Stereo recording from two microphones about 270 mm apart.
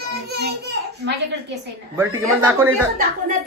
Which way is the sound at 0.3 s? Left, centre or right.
Right.